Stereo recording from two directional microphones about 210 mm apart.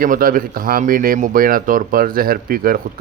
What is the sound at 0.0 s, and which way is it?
Speech, 40° right (ahead or behind).